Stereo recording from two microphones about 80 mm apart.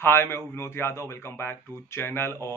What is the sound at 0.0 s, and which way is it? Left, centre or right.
A man's voice, left.